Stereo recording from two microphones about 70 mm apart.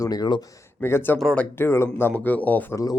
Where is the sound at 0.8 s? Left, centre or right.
Left.